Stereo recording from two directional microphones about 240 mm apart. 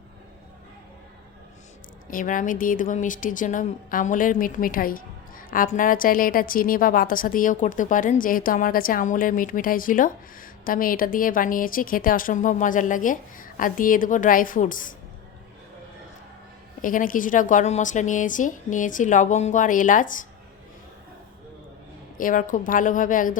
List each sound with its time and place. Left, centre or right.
2.0 s speech: left
16.8 s speech: left
22.2 s speech: left